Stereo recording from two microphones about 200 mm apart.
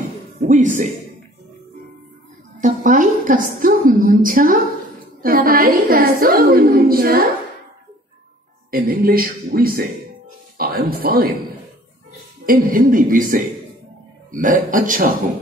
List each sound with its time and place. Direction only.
0.4 s speech: 40° right (ahead or behind)
2.6 s a woman's voice: 40° right (ahead or behind)
8.6 s a woman's voice: 45° right (ahead or behind)
12.4 s a woman's voice: 45° right (ahead or behind)